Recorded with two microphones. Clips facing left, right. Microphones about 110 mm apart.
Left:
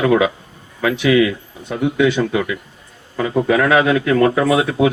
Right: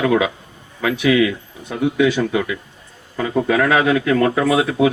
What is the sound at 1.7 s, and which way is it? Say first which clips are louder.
Speech: left 1 dB; 30° left (ahead or behind).